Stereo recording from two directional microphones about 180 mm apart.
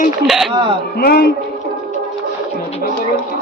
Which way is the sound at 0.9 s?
60° left (ahead or behind).